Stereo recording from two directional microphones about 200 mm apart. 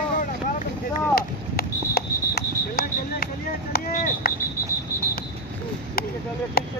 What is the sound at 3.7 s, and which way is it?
Speech, 45° left (ahead or behind).